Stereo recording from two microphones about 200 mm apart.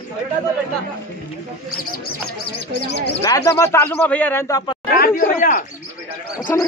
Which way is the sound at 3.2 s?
15° left (ahead or behind).